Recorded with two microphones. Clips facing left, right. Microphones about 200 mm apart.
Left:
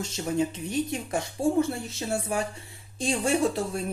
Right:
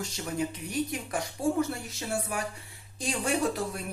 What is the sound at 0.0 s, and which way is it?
Speech, 25° left (ahead or behind).